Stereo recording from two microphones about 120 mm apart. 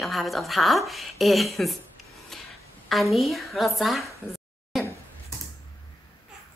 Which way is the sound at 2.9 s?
Centre (ahead or behind).